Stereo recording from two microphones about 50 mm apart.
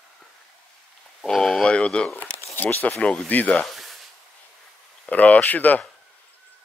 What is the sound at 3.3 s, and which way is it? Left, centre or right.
Speech, left.